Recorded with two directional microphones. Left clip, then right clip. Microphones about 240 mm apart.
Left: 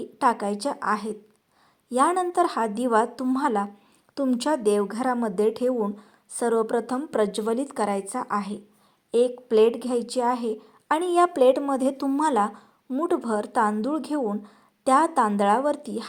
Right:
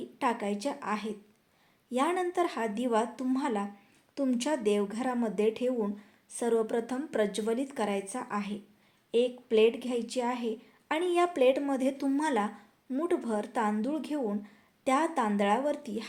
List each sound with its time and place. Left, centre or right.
0.5 s a woman's voice: left